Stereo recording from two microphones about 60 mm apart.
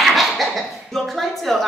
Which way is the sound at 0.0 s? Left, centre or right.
Centre.